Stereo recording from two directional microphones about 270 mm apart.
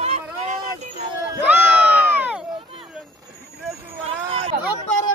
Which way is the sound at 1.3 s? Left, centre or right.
Centre.